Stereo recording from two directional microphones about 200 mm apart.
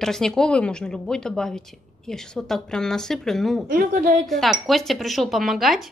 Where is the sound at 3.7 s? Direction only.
45° right (ahead or behind).